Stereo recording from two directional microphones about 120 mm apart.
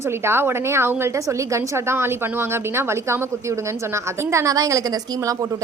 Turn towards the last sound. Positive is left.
turn(degrees=-30)  # may be behind; listen again after turning